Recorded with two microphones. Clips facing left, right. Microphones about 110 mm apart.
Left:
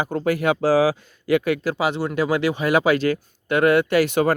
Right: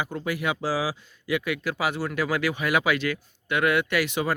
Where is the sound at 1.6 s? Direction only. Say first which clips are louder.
Left 5 dB; 25° left (ahead or behind).